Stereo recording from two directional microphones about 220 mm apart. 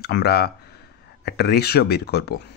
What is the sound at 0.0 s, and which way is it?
Speech, 45° left (ahead or behind).